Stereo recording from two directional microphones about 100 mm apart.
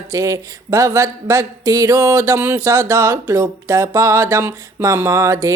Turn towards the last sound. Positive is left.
turn(degrees=-30)  # may be behind; listen again after turning